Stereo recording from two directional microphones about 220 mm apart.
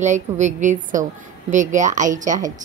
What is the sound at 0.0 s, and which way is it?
A woman's voice, 35° right (ahead or behind).